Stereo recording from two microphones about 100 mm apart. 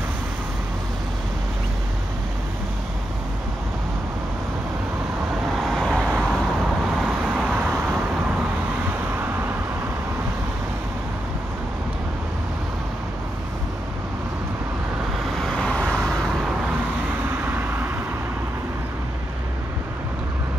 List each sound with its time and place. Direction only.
5.6 s vehicle: centre (ahead or behind)
6.0 s vehicle: 10° right (ahead or behind)
15.3 s vehicle: 5° left (ahead or behind)
17.4 s vehicle: 20° right (ahead or behind)